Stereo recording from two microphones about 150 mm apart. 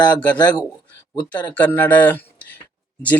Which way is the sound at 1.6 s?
10° left (ahead or behind).